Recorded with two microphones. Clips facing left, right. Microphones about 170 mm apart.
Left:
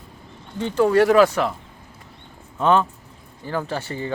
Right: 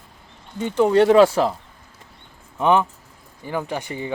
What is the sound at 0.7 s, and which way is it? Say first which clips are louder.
Speech: right 1 dB; 20° right (ahead or behind).